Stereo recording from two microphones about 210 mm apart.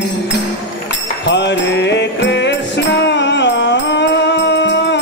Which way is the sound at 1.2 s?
55° left (ahead or behind).